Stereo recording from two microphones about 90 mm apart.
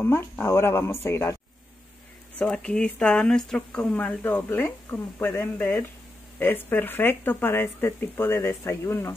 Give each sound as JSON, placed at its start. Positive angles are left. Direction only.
{"t": 0.0, "sound": "speech", "side_deg": 25}
{"t": 2.3, "sound": "speech", "side_deg": 10}